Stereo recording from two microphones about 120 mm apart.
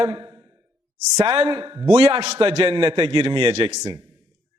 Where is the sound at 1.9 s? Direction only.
45° right (ahead or behind).